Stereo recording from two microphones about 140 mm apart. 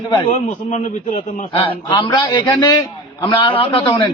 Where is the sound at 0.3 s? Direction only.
55° left (ahead or behind).